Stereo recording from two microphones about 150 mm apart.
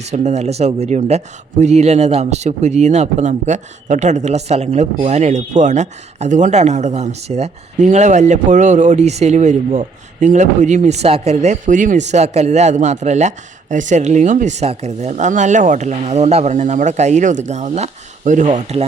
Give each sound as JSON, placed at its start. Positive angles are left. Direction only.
{"t": 0.1, "sound": "speech", "side_deg": -50}